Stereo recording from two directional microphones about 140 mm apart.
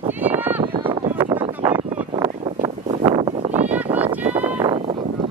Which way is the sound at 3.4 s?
50° right (ahead or behind).